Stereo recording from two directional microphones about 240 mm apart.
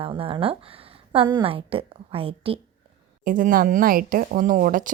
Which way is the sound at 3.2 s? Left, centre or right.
Right.